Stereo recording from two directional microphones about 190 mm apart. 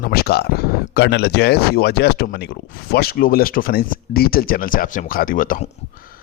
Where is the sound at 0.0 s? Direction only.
55° left (ahead or behind).